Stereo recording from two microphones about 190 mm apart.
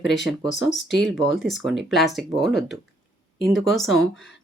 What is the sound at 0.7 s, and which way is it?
Speech, 70° left (ahead or behind).